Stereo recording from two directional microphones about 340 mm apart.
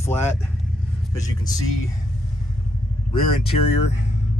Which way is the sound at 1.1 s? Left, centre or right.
Centre.